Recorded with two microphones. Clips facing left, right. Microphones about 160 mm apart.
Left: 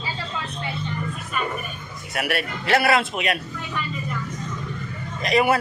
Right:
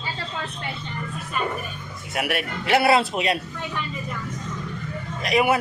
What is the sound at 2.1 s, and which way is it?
Speech, 15° right (ahead or behind).